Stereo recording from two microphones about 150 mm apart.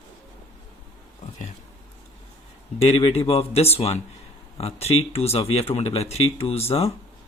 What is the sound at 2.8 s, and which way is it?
Speech, 40° left (ahead or behind).